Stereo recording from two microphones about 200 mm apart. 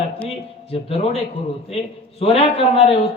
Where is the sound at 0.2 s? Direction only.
30° left (ahead or behind).